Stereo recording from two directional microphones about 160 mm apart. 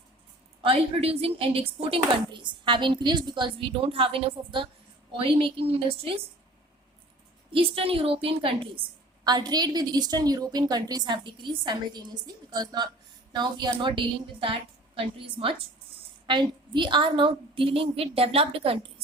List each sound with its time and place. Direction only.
0.6 s a woman's voice: 35° right (ahead or behind)
7.5 s a woman's voice: 35° right (ahead or behind)